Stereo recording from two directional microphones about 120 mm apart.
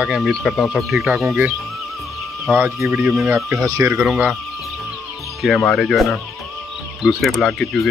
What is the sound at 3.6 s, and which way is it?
Speech, 30° right (ahead or behind).